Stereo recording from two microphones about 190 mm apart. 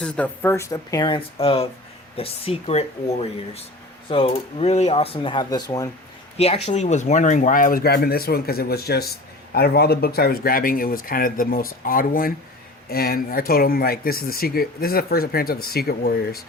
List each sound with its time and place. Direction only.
0.0 s speech: 10° left (ahead or behind)
6.3 s speech: 30° left (ahead or behind); by 16.4 s 55° left (ahead or behind)